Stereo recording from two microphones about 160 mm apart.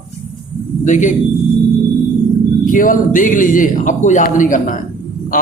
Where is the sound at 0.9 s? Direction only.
50° left (ahead or behind).